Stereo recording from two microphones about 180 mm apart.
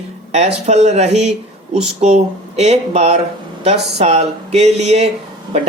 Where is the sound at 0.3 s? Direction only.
35° right (ahead or behind).